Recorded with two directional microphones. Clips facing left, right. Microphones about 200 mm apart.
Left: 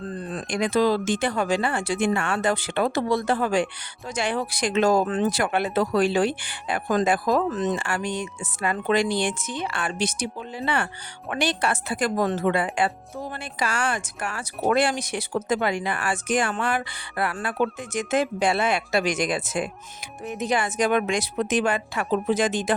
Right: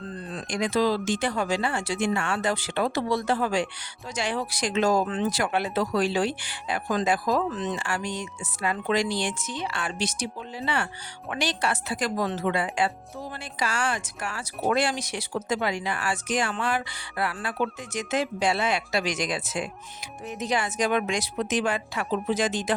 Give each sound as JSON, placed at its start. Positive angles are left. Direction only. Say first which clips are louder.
{"t": 0.3, "sound": "speech", "louder": "left 2 dB", "side_deg": 60}